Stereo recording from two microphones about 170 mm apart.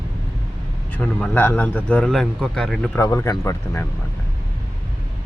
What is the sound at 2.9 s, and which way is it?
Speech, 20° left (ahead or behind).